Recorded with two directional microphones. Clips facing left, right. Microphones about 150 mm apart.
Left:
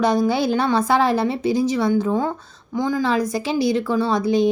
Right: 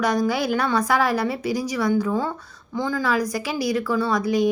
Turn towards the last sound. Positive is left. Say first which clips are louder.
# left 3 dB
turn(degrees=25)  # may be behind; listen again after turning